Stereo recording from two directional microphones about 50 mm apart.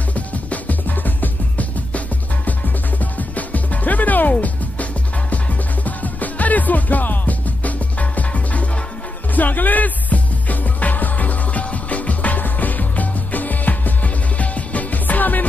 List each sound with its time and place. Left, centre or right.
0.1 s music: left
5.9 s music: left